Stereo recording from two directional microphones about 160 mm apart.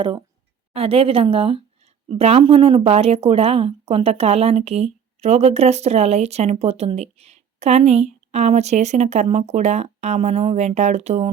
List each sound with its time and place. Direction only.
0.7 s speech: 40° right (ahead or behind)